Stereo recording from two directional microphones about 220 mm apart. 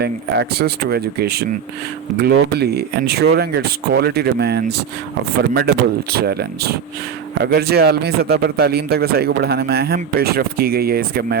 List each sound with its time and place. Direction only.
0.0 s a man's voice: 45° right (ahead or behind)